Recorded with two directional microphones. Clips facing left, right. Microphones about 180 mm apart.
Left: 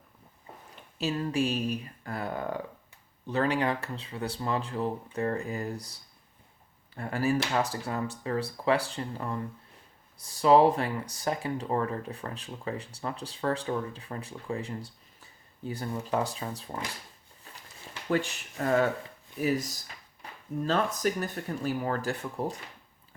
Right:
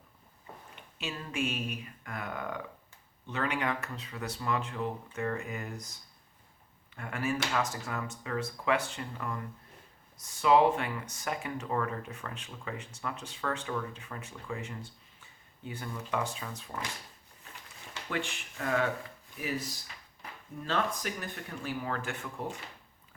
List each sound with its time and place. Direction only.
0.8 s speech: 35° left (ahead or behind)
18.1 s speech: 40° left (ahead or behind)
20.7 s speech: 40° left (ahead or behind)